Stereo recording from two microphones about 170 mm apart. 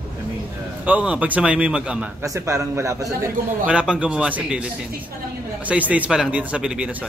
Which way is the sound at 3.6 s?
5° right (ahead or behind).